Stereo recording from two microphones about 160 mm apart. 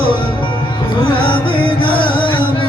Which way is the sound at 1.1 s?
30° left (ahead or behind).